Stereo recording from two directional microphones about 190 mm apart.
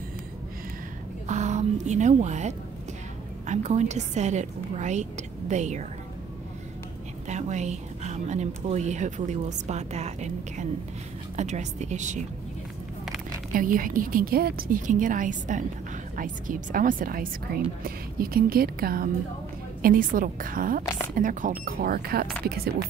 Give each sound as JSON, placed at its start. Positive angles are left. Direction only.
{"t": 1.2, "sound": "speech", "side_deg": -40}
{"t": 7.2, "sound": "speech", "side_deg": -40}
{"t": 13.5, "sound": "a woman's voice", "side_deg": -45}